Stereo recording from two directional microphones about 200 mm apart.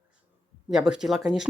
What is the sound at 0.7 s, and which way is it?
Speech, 5° right (ahead or behind).